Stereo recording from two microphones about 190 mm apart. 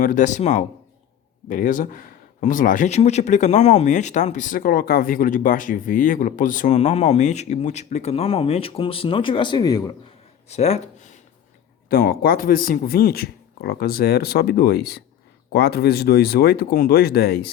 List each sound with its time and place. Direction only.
0.0 s speech: 45° left (ahead or behind); by 9.9 s 20° left (ahead or behind)
10.5 s speech: 35° left (ahead or behind)
11.9 s speech: 50° left (ahead or behind)